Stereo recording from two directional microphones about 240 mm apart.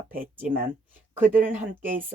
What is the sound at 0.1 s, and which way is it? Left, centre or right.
Speech, centre.